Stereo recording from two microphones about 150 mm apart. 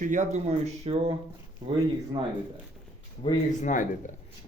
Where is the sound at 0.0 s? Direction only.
55° right (ahead or behind).